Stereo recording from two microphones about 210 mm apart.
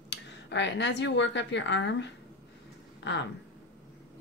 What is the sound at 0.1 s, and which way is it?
Speech, 60° left (ahead or behind).